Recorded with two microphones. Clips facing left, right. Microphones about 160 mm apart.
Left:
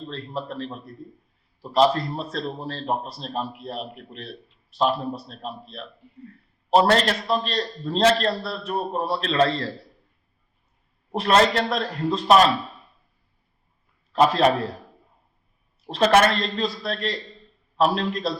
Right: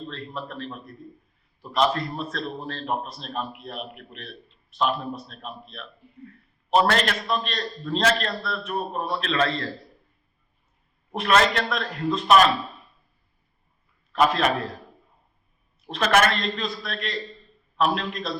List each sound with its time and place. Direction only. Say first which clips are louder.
0.1 s a man's voice: left 3 dB; 30° left (ahead or behind)
11.1 s a man's voice: left 2 dB; 35° left (ahead or behind)
14.1 s a man's voice: left 3 dB; 30° left (ahead or behind)
15.9 s a man's voice: left 3 dB; 30° left (ahead or behind)